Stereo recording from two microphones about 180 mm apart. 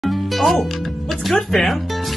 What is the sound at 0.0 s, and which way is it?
Speech, centre (ahead or behind).